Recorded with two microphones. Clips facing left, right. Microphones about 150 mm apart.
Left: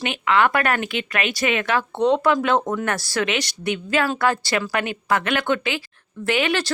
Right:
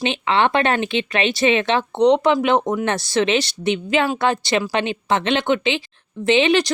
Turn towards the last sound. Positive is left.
turn(degrees=-20)  # may be behind; listen again after turning